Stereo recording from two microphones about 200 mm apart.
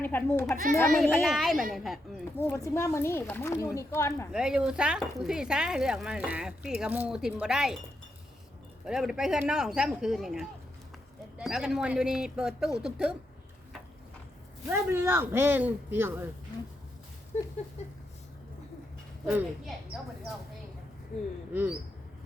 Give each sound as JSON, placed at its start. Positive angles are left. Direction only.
{"t": 0.0, "sound": "a child's voice", "side_deg": 10}
{"t": 1.1, "sound": "speech", "side_deg": 0}
{"t": 2.5, "sound": "speech", "side_deg": 15}
{"t": 4.3, "sound": "speech", "side_deg": -5}
{"t": 8.8, "sound": "speech", "side_deg": -5}
{"t": 14.7, "sound": "speech", "side_deg": -10}
{"t": 17.3, "sound": "a sound", "side_deg": 35}
{"t": 19.2, "sound": "speech", "side_deg": 0}
{"t": 21.5, "sound": "speech", "side_deg": -10}